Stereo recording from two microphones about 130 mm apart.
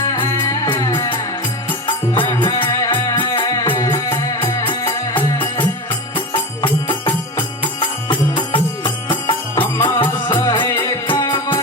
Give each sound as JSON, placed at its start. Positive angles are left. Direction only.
{"t": 0.0, "sound": "music", "side_deg": 30}
{"t": 6.8, "sound": "music", "side_deg": 35}